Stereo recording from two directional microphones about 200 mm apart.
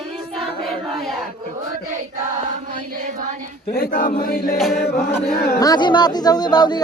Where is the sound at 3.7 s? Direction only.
45° left (ahead or behind).